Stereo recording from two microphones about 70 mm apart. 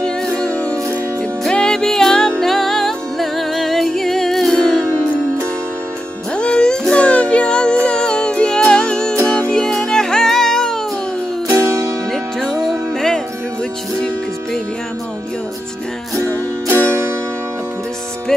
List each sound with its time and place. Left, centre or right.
0.0 s music: centre
6.3 s music: centre
11.4 s music: right
12.1 s music: centre
16.2 s music: right